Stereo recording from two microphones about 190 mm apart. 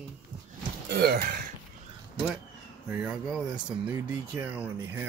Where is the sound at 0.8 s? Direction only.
60° right (ahead or behind).